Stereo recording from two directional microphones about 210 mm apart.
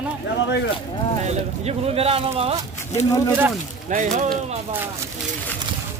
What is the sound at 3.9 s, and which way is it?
Speech, 35° right (ahead or behind).